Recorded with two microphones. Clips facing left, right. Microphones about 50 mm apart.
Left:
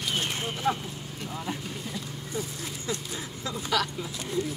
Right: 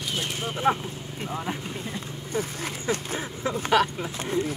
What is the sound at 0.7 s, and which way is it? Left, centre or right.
Speech, right.